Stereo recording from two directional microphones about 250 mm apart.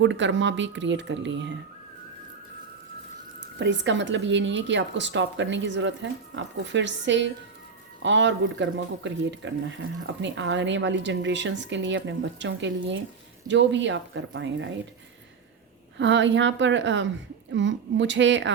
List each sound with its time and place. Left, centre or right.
0.0 s speech: right
3.6 s speech: right
16.0 s speech: right